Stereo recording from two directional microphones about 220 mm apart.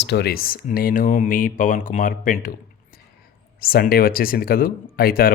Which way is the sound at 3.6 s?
45° left (ahead or behind).